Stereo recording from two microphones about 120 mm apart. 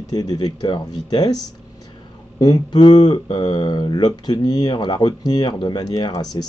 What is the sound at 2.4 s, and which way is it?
Speech, 35° left (ahead or behind).